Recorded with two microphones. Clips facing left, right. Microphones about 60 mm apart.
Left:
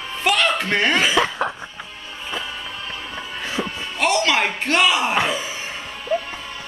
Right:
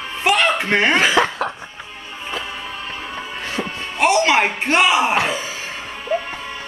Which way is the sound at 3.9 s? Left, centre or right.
Centre.